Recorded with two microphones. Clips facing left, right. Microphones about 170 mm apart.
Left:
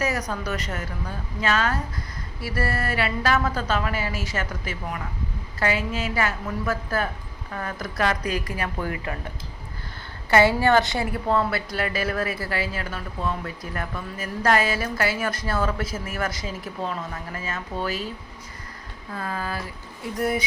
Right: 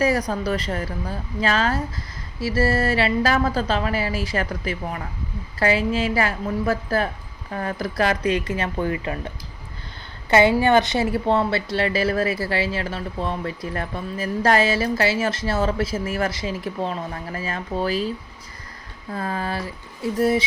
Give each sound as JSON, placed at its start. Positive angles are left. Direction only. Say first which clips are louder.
{"t": 0.0, "sound": "a woman's voice", "louder": "right 6 dB", "side_deg": -35}
{"t": 10.2, "sound": "a woman's voice", "louder": "right 2 dB", "side_deg": -20}
{"t": 19.1, "sound": "a woman's voice", "louder": "right 4 dB", "side_deg": -35}